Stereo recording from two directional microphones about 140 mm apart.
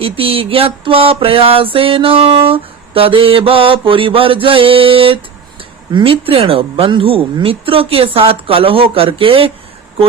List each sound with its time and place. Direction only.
0.0 s music: 40° right (ahead or behind)